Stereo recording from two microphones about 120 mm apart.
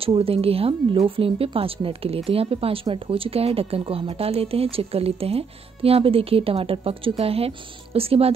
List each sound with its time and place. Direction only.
0.0 s speech: 50° right (ahead or behind)